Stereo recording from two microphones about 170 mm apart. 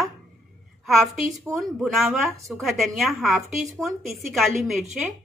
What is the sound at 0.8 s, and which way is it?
A woman's voice, centre (ahead or behind).